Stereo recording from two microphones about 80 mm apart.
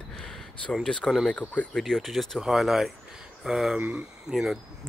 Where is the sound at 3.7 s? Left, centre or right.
Centre.